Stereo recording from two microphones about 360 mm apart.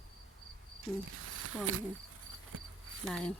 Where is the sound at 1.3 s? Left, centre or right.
Right.